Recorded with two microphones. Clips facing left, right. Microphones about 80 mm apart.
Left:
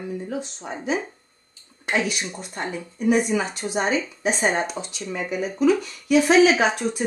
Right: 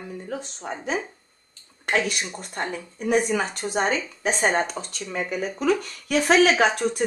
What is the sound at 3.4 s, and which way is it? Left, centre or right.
Speech, centre.